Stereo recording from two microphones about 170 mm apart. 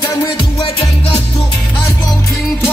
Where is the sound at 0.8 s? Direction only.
35° left (ahead or behind).